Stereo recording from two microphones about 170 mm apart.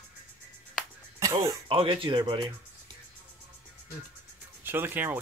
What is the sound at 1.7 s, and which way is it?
Speech, 30° right (ahead or behind).